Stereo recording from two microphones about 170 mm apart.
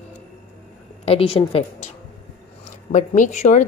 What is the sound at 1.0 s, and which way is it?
Speech, 35° left (ahead or behind).